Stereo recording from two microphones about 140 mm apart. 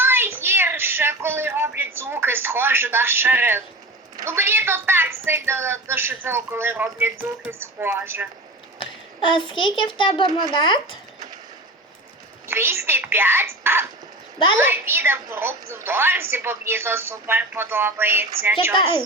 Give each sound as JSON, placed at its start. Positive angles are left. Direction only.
{"t": 0.0, "sound": "a sound", "side_deg": -15}
{"t": 4.2, "sound": "a woman's voice", "side_deg": -15}
{"t": 8.8, "sound": "a child's voice", "side_deg": 35}
{"t": 12.5, "sound": "a woman's voice", "side_deg": -15}